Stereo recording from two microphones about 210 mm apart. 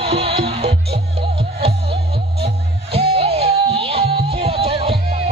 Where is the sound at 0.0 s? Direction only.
30° right (ahead or behind).